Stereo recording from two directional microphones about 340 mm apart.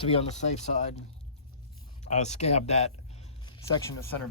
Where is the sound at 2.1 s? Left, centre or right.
Centre.